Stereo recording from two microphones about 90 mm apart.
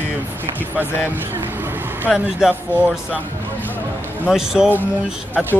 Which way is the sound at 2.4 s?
5° right (ahead or behind).